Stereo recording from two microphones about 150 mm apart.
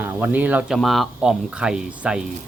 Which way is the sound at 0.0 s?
10° right (ahead or behind).